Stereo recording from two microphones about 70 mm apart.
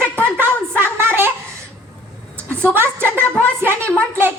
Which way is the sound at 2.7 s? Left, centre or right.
Right.